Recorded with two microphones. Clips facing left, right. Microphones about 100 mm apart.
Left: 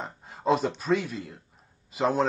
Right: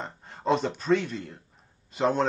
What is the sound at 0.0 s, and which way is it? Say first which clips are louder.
Speech: left 2 dB; 5° left (ahead or behind).